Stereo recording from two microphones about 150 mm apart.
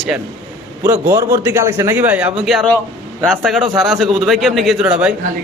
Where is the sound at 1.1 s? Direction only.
15° right (ahead or behind).